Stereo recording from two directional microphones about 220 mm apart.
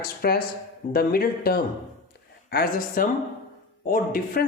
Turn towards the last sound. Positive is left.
turn(degrees=40)  # may be behind; listen again after turning